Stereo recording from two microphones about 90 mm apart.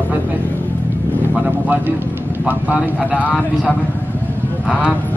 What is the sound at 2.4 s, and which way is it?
Speech, 20° right (ahead or behind).